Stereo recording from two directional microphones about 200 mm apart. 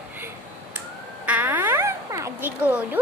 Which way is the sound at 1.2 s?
10° right (ahead or behind).